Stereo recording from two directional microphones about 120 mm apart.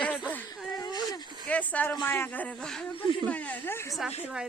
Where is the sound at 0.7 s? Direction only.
35° left (ahead or behind).